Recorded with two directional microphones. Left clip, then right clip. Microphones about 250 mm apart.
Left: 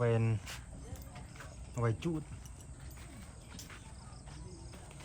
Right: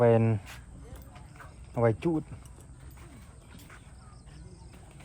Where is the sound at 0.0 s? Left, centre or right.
Right.